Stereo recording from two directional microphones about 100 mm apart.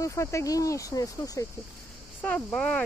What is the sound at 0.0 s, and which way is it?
Speech, 30° left (ahead or behind).